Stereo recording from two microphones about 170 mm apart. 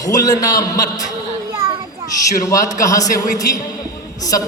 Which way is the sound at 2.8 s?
20° left (ahead or behind).